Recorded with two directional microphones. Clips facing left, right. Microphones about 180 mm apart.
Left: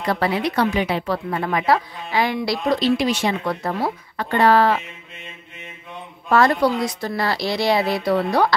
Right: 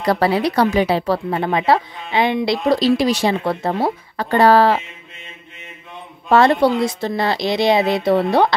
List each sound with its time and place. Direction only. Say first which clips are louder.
0.0 s a woman's voice: right 4 dB; 35° right (ahead or behind)
2.7 s a woman's voice: right 3 dB; 35° right (ahead or behind)
6.2 s speech: right 3 dB; 25° right (ahead or behind)